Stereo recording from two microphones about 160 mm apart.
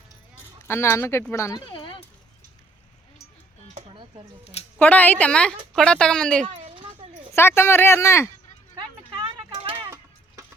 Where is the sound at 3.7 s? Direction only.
35° right (ahead or behind).